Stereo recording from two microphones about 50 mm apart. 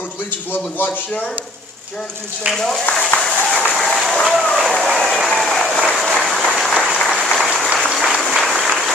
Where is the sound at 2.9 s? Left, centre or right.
Left.